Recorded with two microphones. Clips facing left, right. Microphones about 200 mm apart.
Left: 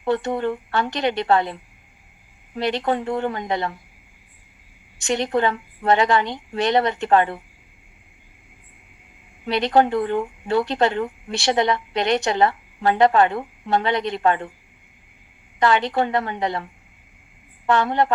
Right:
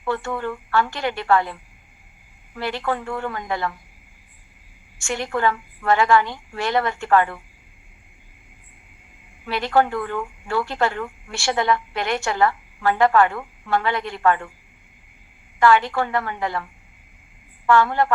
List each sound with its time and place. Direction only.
0.0 s speech: 20° left (ahead or behind)
4.9 s speech: 20° left (ahead or behind)
9.5 s speech: 20° left (ahead or behind)
15.6 s speech: 20° left (ahead or behind)
17.7 s speech: 20° left (ahead or behind)